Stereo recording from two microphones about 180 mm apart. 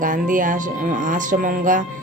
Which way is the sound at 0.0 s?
50° right (ahead or behind).